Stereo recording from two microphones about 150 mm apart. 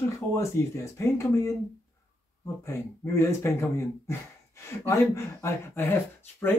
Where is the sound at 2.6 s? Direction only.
20° left (ahead or behind).